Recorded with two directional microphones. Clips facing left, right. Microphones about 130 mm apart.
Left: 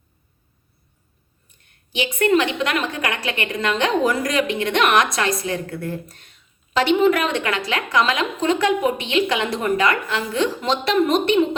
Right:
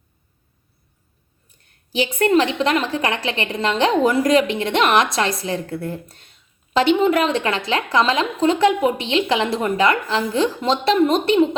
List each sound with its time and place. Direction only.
1.5 s a woman's voice: 35° right (ahead or behind)